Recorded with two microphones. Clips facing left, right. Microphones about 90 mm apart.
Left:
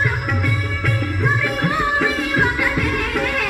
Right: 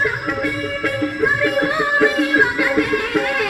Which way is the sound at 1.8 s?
15° right (ahead or behind).